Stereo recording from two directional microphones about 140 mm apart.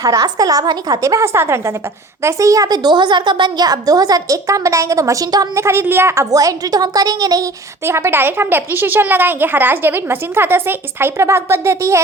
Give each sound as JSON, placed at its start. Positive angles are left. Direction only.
{"t": 0.0, "sound": "a woman's voice", "side_deg": -25}